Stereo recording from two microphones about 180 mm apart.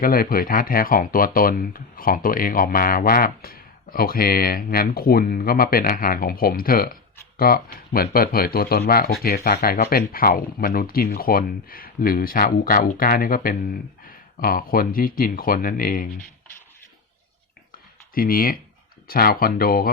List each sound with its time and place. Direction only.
0.0 s speech: 55° left (ahead or behind)
17.7 s a sound: 55° left (ahead or behind)
19.0 s speech: 55° left (ahead or behind)